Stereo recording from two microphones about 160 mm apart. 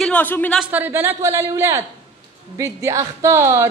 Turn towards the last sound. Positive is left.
turn(degrees=-15)  # may be behind; listen again after turning